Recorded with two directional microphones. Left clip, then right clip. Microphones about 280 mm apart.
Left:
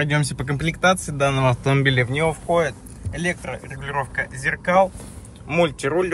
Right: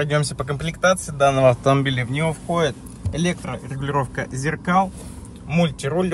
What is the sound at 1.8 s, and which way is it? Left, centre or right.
Speech, centre.